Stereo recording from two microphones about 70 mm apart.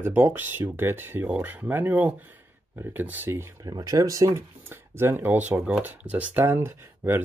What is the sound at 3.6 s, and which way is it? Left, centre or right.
Speech, right.